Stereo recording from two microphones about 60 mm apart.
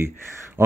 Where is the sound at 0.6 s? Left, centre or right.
Right.